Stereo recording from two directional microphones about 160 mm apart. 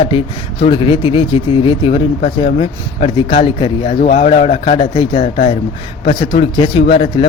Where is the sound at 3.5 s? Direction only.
30° left (ahead or behind).